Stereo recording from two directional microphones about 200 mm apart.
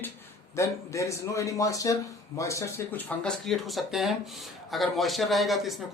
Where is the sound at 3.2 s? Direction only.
Centre (ahead or behind).